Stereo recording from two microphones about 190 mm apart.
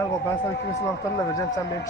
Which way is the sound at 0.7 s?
15° left (ahead or behind).